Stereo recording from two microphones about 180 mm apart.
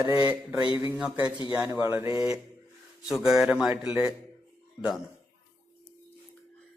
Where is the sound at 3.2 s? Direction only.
5° right (ahead or behind).